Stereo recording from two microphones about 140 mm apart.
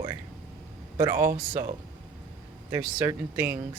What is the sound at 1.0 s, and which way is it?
Speech, 20° right (ahead or behind).